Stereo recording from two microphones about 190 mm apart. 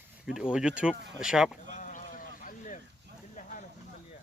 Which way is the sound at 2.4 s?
45° left (ahead or behind).